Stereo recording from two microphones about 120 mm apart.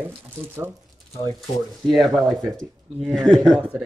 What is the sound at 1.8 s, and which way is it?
Speech, centre (ahead or behind).